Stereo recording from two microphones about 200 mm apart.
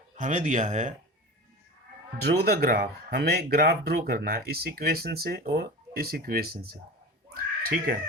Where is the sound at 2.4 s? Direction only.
50° right (ahead or behind).